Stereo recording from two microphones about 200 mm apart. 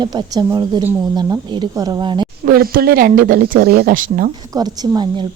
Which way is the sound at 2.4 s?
45° right (ahead or behind).